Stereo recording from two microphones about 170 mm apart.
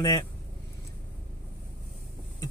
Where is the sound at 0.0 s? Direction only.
20° left (ahead or behind).